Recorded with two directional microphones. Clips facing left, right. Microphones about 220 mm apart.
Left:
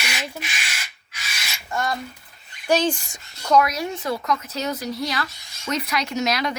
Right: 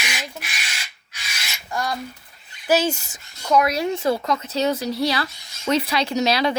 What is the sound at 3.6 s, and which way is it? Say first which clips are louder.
Speech: right 3 dB; 30° right (ahead or behind).